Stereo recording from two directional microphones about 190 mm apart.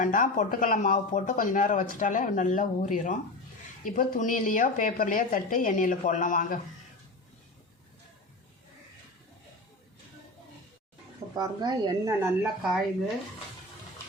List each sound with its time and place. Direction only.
0.0 s speech: 45° left (ahead or behind)
11.3 s speech: 20° right (ahead or behind)